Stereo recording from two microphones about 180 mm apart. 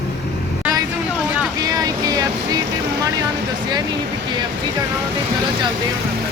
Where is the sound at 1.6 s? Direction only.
20° right (ahead or behind).